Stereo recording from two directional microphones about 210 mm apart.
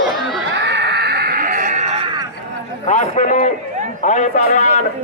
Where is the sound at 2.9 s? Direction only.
35° left (ahead or behind).